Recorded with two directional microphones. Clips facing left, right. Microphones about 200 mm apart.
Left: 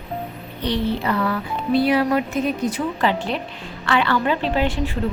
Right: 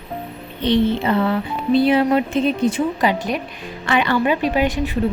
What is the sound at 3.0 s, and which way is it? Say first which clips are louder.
A woman's voice: right 2 dB; 15° right (ahead or behind).